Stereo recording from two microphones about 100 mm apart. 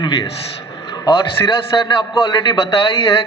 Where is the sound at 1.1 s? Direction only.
55° left (ahead or behind).